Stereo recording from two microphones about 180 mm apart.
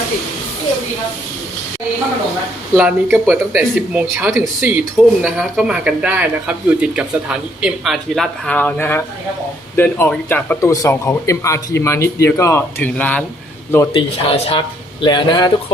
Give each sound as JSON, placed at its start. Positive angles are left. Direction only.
{"t": 2.7, "sound": "speech", "side_deg": -10}
{"t": 13.9, "sound": "speech", "side_deg": 35}